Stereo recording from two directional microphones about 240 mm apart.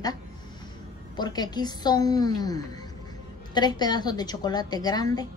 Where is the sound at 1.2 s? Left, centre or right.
Centre.